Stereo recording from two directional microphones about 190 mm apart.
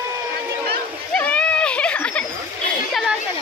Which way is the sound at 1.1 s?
5° left (ahead or behind).